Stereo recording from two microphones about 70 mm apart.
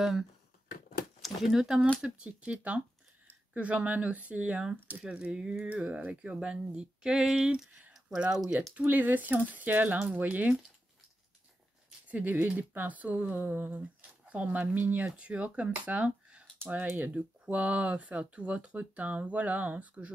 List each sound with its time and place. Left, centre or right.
0.0 s speech: centre
8.7 s speech: right
12.1 s speech: right